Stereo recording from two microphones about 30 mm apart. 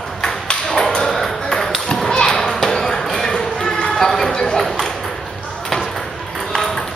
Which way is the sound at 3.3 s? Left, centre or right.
Left.